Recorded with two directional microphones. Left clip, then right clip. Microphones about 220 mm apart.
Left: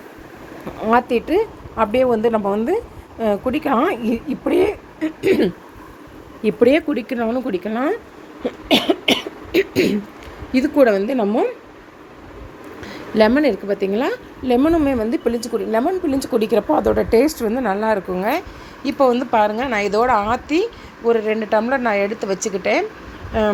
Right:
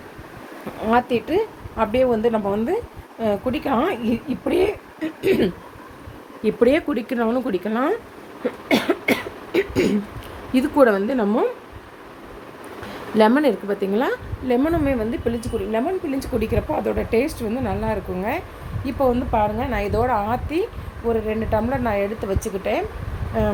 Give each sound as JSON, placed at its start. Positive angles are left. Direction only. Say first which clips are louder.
{"t": 0.9, "sound": "a woman's voice", "louder": "left 3 dB", "side_deg": 20}
{"t": 8.4, "sound": "cough", "louder": "left 3 dB", "side_deg": 0}
{"t": 10.5, "sound": "speech", "louder": "left 2 dB", "side_deg": 0}
{"t": 13.1, "sound": "a woman's voice", "louder": "left 2 dB", "side_deg": 0}